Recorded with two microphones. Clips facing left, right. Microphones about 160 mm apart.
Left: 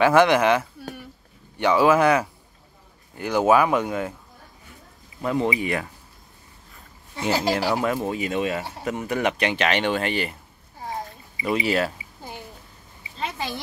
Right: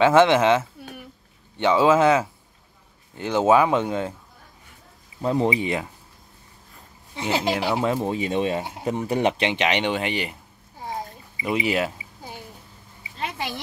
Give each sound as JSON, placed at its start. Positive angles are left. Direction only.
{"t": 0.0, "sound": "speech", "side_deg": -25}
{"t": 5.2, "sound": "speech", "side_deg": -30}
{"t": 7.2, "sound": "speech", "side_deg": -20}
{"t": 11.4, "sound": "speech", "side_deg": -15}